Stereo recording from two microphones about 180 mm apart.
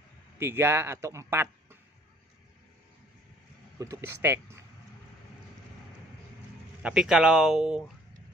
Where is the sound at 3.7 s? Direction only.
20° right (ahead or behind).